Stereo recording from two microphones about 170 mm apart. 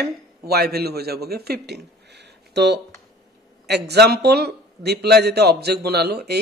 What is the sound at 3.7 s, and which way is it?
A man's voice, 75° right (ahead or behind).